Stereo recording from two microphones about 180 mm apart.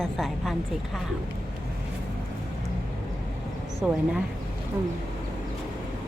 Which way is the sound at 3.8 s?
5° right (ahead or behind).